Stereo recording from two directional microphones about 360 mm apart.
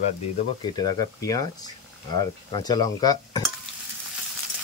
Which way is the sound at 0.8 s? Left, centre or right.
Centre.